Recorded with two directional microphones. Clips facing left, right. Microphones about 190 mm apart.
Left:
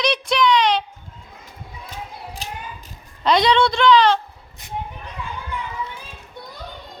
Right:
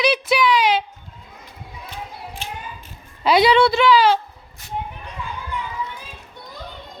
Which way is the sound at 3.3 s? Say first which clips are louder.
Right 2 dB; 5° right (ahead or behind).